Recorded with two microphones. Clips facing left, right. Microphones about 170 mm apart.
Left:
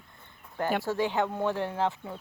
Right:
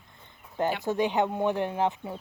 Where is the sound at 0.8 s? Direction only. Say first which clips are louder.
Right 2 dB; 20° right (ahead or behind).